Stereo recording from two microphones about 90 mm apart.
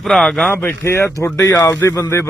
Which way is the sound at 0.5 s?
25° left (ahead or behind).